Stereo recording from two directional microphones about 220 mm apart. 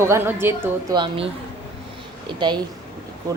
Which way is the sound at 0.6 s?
20° right (ahead or behind).